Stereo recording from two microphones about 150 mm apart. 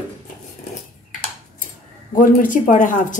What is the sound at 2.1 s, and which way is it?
Speech, 65° left (ahead or behind).